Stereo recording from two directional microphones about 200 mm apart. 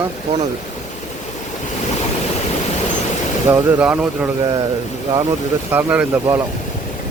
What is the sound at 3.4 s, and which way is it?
Speech, 10° right (ahead or behind).